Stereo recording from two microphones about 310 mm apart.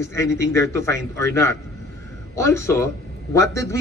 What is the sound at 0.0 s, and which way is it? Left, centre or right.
A man's voice, centre.